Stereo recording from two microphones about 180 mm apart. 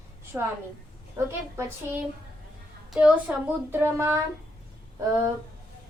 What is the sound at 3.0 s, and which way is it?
A child's voice, 5° right (ahead or behind).